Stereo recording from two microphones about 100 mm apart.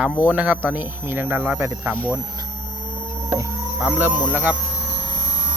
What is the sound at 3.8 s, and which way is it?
Speech, 15° right (ahead or behind).